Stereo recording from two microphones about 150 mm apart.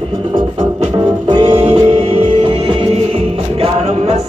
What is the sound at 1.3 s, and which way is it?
Music, 35° right (ahead or behind).